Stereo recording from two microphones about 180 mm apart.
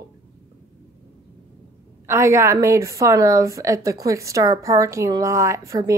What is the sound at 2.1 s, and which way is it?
A woman's voice, 15° right (ahead or behind).